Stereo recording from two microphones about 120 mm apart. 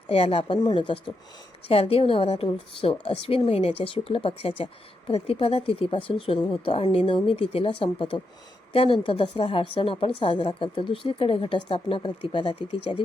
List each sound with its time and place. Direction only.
0.1 s a woman's voice: 55° left (ahead or behind)